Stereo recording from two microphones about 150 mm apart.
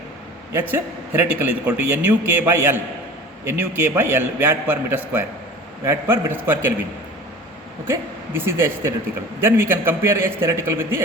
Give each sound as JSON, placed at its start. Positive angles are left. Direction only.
{"t": 1.2, "sound": "a man's voice", "side_deg": -10}
{"t": 7.9, "sound": "a man's voice", "side_deg": -15}